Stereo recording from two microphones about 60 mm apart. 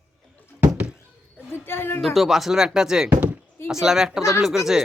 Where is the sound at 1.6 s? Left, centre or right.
Left.